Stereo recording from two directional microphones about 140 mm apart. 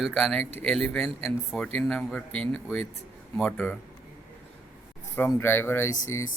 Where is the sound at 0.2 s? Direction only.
10° left (ahead or behind).